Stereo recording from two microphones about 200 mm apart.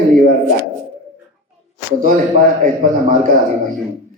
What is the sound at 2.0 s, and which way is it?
Speech, 40° right (ahead or behind).